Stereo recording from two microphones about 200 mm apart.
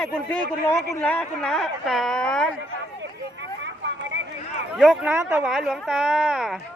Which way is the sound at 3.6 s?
65° right (ahead or behind).